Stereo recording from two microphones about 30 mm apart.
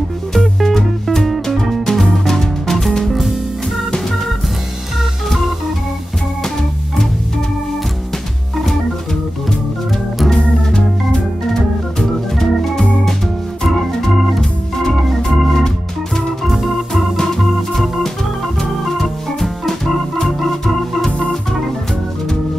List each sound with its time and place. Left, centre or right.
0.4 s music: centre
10.3 s organ: left
12.0 s organ: centre
14.4 s organ: centre
16.9 s organ: centre
19.4 s organ: centre